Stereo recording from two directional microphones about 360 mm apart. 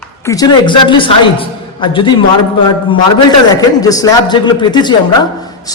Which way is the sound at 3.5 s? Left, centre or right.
Centre.